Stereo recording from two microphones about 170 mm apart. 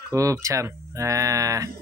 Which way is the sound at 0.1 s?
20° right (ahead or behind).